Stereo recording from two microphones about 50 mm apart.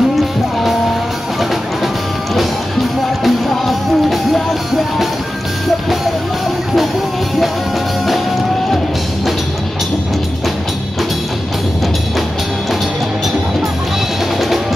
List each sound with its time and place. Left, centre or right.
0.1 s music: centre
3.3 s music: centre